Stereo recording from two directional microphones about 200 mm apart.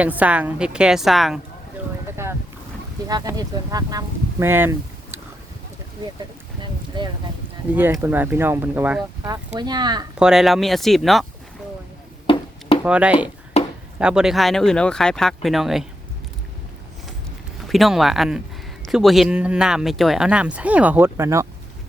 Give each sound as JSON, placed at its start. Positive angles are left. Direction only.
{"t": 0.0, "sound": "speech", "side_deg": -5}
{"t": 2.2, "sound": "speech", "side_deg": -10}
{"t": 6.6, "sound": "speech", "side_deg": -25}
{"t": 7.8, "sound": "speech", "side_deg": -10}
{"t": 10.2, "sound": "speech", "side_deg": -5}
{"t": 12.3, "sound": "chop", "side_deg": 25}
{"t": 12.8, "sound": "speech", "side_deg": -5}
{"t": 17.7, "sound": "speech", "side_deg": 0}